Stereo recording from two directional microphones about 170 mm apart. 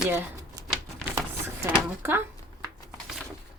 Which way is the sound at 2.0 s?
15° right (ahead or behind).